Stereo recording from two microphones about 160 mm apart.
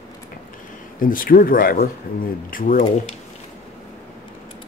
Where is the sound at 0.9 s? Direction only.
60° left (ahead or behind).